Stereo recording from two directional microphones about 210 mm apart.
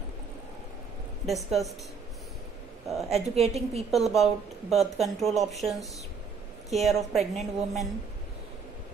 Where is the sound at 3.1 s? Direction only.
30° right (ahead or behind).